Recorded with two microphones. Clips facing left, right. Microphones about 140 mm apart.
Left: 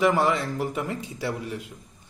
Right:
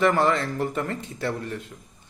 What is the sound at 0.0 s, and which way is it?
Speech, 10° left (ahead or behind).